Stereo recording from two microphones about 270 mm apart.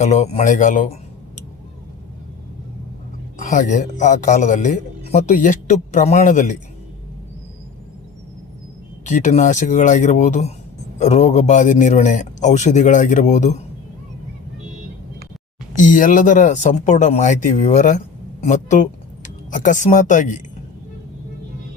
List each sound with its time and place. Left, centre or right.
0.0 s a man's voice: left
3.4 s a man's voice: left
9.0 s a man's voice: left
15.7 s a man's voice: left